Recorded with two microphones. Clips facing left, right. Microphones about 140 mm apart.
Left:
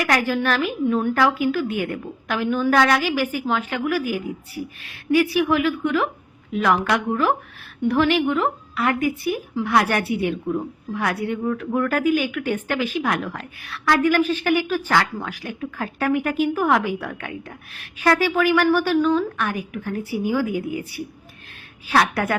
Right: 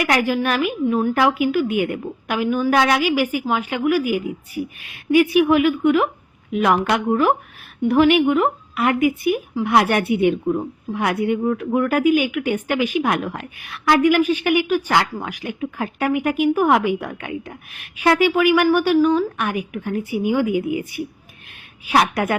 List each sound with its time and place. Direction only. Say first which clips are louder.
0.1 s a woman's voice: right 1 dB; 15° right (ahead or behind)
1.1 s a woman's voice: right 2 dB; 15° right (ahead or behind)